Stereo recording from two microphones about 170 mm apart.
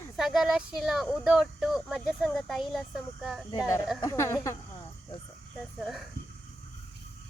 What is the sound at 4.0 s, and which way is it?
Speech, 15° left (ahead or behind).